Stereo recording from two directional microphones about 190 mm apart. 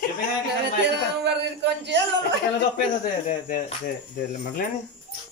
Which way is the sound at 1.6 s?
65° right (ahead or behind).